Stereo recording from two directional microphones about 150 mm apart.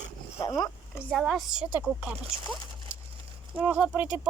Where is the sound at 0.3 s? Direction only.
25° left (ahead or behind).